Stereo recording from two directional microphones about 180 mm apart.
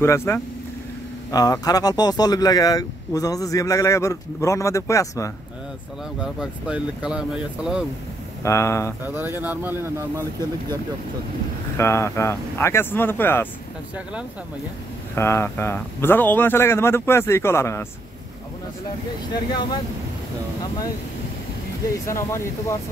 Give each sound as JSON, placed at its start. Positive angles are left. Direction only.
{"t": 0.0, "sound": "a man's voice", "side_deg": 15}
{"t": 6.2, "sound": "speech", "side_deg": -5}
{"t": 8.4, "sound": "a man's voice", "side_deg": 15}
{"t": 9.0, "sound": "speech", "side_deg": -10}
{"t": 11.7, "sound": "a man's voice", "side_deg": 15}
{"t": 15.1, "sound": "a man's voice", "side_deg": 15}
{"t": 22.0, "sound": "a man's voice", "side_deg": 15}